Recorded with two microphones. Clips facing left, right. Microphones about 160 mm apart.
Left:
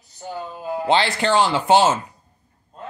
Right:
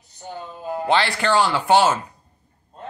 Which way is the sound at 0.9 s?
20° left (ahead or behind).